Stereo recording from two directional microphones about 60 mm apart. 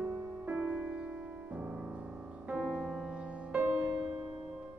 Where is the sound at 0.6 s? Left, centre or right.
Right.